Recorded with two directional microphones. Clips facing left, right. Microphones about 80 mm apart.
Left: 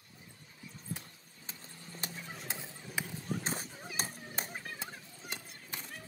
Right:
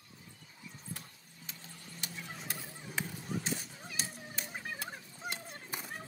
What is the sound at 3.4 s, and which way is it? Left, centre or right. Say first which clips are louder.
Children playing: even; left.